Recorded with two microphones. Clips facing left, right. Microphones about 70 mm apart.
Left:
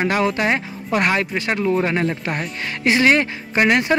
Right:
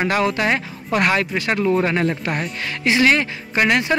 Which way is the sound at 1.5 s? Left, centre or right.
Centre.